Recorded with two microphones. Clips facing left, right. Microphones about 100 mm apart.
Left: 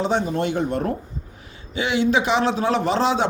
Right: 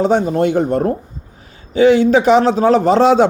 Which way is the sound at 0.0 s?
45° right (ahead or behind).